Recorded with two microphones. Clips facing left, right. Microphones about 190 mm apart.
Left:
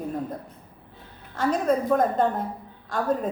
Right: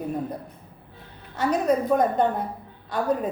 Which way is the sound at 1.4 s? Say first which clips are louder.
Right 1 dB; 5° right (ahead or behind).